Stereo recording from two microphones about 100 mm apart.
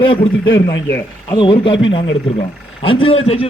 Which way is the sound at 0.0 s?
60° left (ahead or behind).